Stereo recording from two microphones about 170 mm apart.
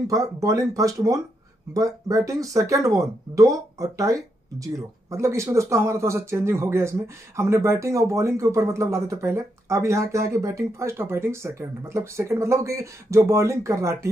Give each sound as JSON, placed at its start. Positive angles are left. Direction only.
{"t": 0.1, "sound": "a man's voice", "side_deg": -20}